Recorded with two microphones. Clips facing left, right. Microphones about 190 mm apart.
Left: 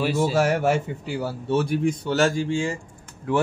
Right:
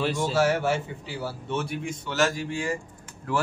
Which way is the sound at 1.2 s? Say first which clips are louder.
Left 6 dB; 35° left (ahead or behind).